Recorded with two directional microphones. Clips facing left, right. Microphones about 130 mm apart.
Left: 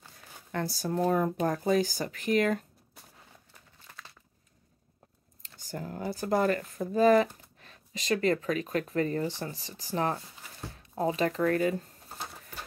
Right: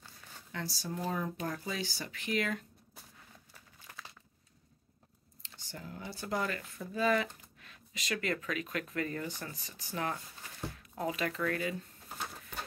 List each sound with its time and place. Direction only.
0.5 s speech: 50° left (ahead or behind)
1.3 s speech: 40° left (ahead or behind)
5.4 s speech: 45° left (ahead or behind)
10.7 s a sound: 30° left (ahead or behind)